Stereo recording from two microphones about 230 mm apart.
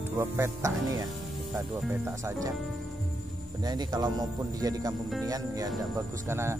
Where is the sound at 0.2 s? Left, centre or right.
Centre.